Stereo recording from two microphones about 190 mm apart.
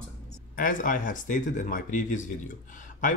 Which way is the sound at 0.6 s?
45° left (ahead or behind).